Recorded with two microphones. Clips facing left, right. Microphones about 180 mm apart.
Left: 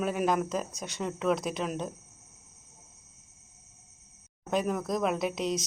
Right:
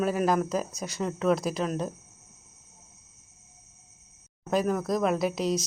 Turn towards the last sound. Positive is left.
turn(degrees=0)  # may be behind; listen again after turning